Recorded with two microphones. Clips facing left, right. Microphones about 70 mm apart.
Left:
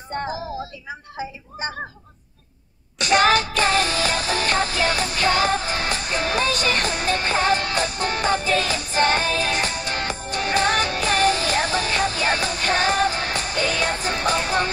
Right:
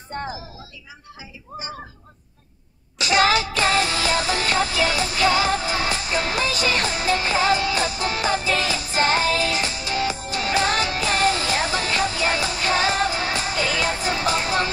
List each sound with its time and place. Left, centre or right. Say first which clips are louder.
0.8 s speech: left 10 dB; left
3.1 s music: left 1 dB; left